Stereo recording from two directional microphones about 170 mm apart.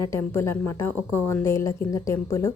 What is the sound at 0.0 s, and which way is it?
A woman's voice, 15° left (ahead or behind).